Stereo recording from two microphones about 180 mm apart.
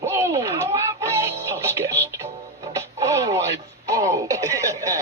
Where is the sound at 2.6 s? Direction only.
15° right (ahead or behind).